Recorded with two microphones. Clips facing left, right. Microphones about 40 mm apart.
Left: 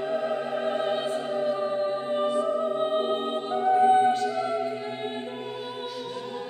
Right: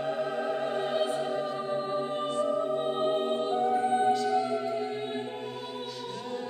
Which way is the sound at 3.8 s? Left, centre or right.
Left.